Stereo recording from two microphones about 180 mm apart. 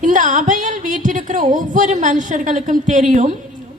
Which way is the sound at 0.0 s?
45° right (ahead or behind).